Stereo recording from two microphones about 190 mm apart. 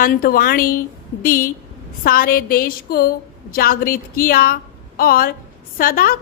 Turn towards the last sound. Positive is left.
turn(degrees=50)  # may be behind; listen again after turning